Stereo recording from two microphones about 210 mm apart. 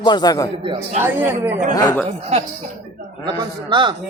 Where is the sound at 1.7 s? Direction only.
15° left (ahead or behind).